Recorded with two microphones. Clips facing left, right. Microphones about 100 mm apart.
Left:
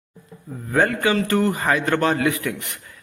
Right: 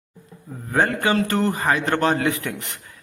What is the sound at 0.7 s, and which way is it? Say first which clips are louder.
A man's voice: left 1 dB; 25° right (ahead or behind).